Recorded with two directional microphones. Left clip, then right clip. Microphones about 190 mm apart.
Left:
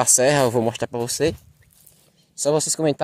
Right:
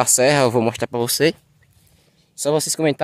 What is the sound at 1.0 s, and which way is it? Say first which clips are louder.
Speech: right 4 dB; 30° right (ahead or behind).